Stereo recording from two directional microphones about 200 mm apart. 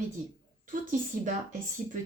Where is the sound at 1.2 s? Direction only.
40° right (ahead or behind).